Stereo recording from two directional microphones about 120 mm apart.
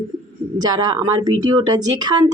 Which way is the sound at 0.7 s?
35° right (ahead or behind).